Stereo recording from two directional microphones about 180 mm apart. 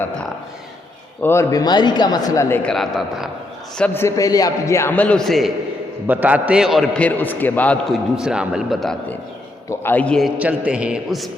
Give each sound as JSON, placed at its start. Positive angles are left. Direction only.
{"t": 1.2, "sound": "speech", "side_deg": 15}
{"t": 2.6, "sound": "a man's voice", "side_deg": 0}
{"t": 3.8, "sound": "a man's voice", "side_deg": 10}
{"t": 10.3, "sound": "a man's voice", "side_deg": -10}